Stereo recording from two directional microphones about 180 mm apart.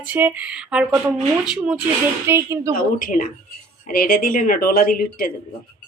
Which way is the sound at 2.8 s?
50° left (ahead or behind).